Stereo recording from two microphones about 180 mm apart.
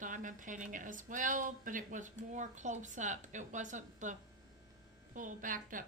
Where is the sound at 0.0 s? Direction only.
45° right (ahead or behind).